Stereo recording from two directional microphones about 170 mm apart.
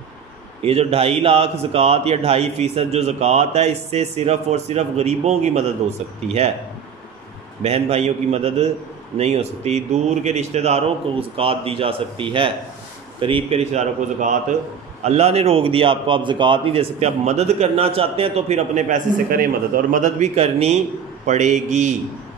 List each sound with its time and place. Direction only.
0.7 s a man's voice: 35° right (ahead or behind)
7.6 s a man's voice: 40° right (ahead or behind)